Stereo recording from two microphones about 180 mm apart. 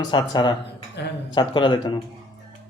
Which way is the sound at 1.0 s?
70° left (ahead or behind).